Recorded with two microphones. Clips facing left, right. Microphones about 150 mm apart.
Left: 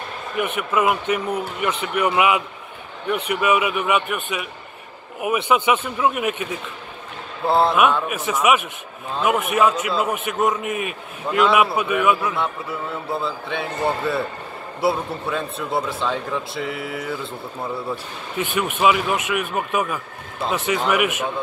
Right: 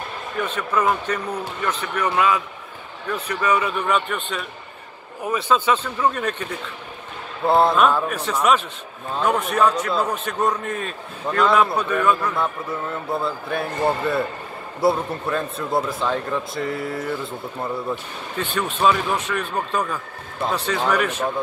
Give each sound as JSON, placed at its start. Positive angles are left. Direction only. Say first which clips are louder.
{"t": 0.4, "sound": "speech", "louder": "left 2 dB", "side_deg": 15}
{"t": 7.4, "sound": "speech", "louder": "right 1 dB", "side_deg": 0}
{"t": 10.0, "sound": "speech", "louder": "left 1 dB", "side_deg": 15}
{"t": 18.4, "sound": "speech", "louder": "left 1 dB", "side_deg": 15}